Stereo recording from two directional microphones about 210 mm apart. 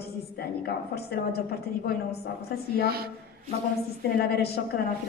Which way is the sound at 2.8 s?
45° right (ahead or behind).